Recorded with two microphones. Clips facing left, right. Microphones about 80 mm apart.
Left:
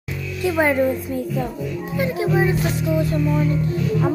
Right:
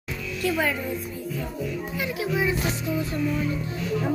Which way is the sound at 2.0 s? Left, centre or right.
Left.